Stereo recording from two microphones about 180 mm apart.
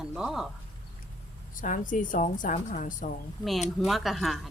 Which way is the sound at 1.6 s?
45° left (ahead or behind).